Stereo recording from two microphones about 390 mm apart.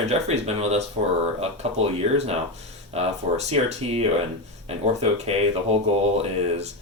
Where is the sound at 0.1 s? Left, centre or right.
Centre.